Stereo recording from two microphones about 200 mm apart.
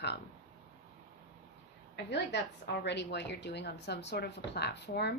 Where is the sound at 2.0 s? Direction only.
60° left (ahead or behind).